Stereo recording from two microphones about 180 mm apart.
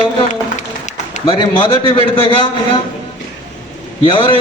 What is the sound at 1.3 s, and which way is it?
A man's voice, 25° left (ahead or behind).